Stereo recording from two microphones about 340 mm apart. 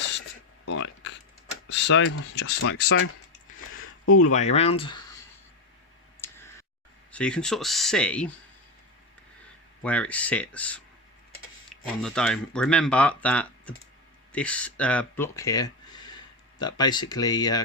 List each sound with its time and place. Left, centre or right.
0.6 s a sound: left
1.7 s speech: left
4.2 s speech: left
6.2 s clicking: centre
7.1 s speech: centre
9.8 s speech: centre